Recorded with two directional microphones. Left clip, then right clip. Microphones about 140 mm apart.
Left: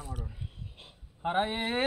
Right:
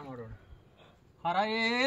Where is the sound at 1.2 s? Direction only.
25° right (ahead or behind).